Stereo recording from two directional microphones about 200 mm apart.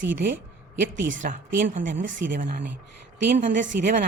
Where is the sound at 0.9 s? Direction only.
40° right (ahead or behind).